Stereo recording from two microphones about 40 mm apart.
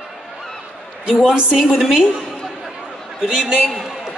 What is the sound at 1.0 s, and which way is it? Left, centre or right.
Speech, right.